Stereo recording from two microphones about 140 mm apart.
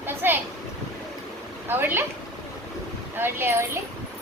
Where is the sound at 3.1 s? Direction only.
15° right (ahead or behind).